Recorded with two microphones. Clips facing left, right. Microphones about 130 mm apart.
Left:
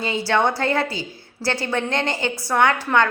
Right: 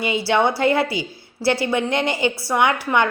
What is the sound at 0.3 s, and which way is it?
A woman's voice, 10° right (ahead or behind).